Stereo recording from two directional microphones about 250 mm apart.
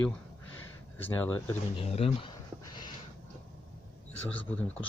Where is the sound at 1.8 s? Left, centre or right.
Left.